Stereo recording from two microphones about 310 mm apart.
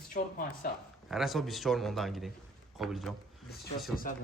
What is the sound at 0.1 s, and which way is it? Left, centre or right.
Speech, left.